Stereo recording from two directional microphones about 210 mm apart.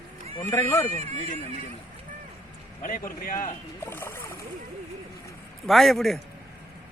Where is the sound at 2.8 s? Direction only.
40° left (ahead or behind).